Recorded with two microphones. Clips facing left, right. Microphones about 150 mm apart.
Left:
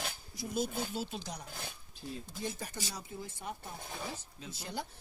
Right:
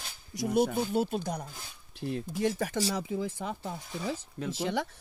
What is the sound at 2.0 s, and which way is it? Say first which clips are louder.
Speech: right 10 dB; 70° right (ahead or behind).